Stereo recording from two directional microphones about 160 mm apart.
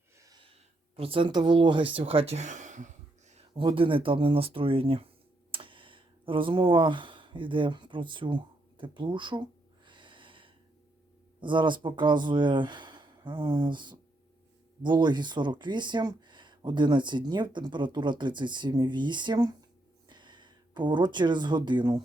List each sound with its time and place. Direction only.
0.9 s speech: 35° right (ahead or behind)
2.0 s gasp: 35° right (ahead or behind)
3.6 s speech: 30° right (ahead or behind)
5.5 s a sound: 35° right (ahead or behind)
11.3 s speech: 30° right (ahead or behind)